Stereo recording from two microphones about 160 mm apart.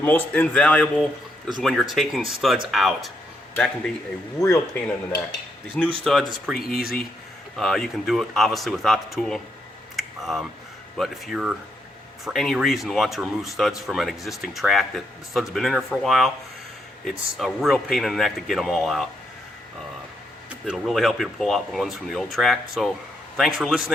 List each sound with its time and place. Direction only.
0.0 s speech: 10° left (ahead or behind)
4.4 s speech: 15° left (ahead or behind)
5.8 s speech: 10° left (ahead or behind)
9.9 s a sound: centre (ahead or behind)
10.9 s speech: centre (ahead or behind)
20.5 s speech: 5° right (ahead or behind)